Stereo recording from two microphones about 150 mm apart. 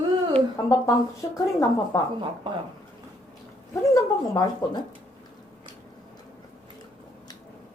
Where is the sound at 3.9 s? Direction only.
25° left (ahead or behind).